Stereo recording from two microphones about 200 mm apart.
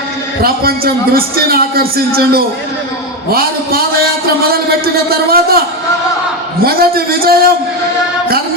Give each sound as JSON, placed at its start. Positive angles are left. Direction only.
{"t": 0.4, "sound": "a man's voice", "side_deg": -50}
{"t": 6.7, "sound": "a man's voice", "side_deg": -50}